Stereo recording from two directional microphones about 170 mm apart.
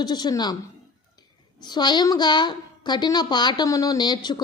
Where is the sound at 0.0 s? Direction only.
25° left (ahead or behind).